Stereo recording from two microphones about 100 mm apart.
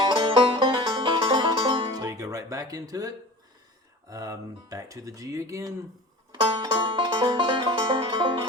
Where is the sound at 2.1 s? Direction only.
35° right (ahead or behind).